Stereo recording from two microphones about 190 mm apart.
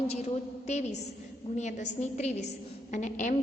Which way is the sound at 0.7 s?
35° left (ahead or behind).